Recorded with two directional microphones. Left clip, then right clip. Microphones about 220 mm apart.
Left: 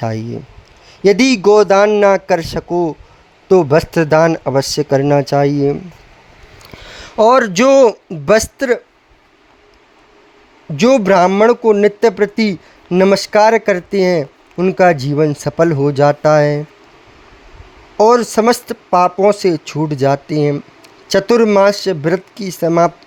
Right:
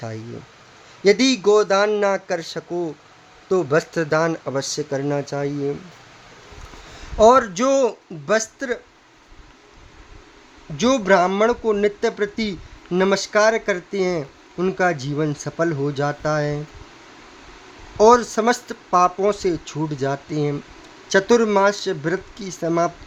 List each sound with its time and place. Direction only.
0.0 s speech: 40° left (ahead or behind)
7.2 s speech: 35° left (ahead or behind)
10.8 s speech: 35° left (ahead or behind)
17.9 s speech: 35° left (ahead or behind)